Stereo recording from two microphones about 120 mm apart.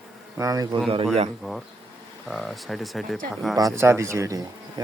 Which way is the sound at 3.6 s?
25° right (ahead or behind).